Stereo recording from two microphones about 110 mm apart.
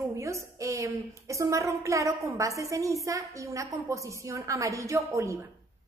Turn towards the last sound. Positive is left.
turn(degrees=-30)  # may be behind; listen again after turning